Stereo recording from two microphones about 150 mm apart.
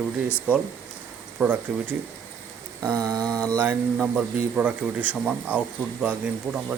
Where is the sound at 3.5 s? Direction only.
15° right (ahead or behind).